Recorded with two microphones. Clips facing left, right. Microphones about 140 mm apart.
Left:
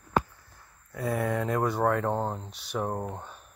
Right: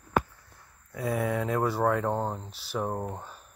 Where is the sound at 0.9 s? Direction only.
Centre (ahead or behind).